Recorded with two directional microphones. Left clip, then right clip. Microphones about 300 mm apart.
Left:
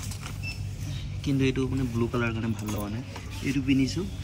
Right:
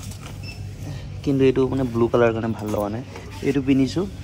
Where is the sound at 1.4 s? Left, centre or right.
Centre.